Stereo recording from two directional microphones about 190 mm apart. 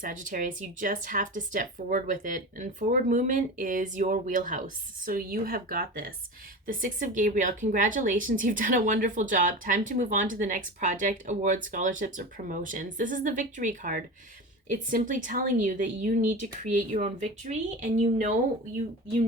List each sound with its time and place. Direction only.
0.0 s speech: 45° right (ahead or behind)